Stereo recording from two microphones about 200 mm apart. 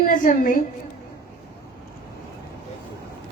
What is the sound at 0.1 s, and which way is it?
Speech, 45° left (ahead or behind).